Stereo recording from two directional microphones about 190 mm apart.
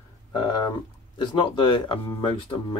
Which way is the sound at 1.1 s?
25° left (ahead or behind).